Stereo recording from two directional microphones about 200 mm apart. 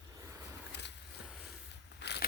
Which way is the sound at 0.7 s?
60° left (ahead or behind).